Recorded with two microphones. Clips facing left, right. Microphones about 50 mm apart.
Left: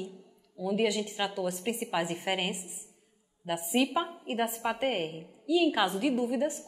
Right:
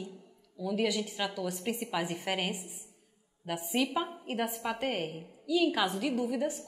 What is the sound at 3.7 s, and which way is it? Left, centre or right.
A woman's voice, centre.